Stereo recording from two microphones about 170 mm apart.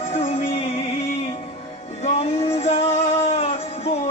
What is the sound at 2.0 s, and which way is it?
Music, 40° left (ahead or behind).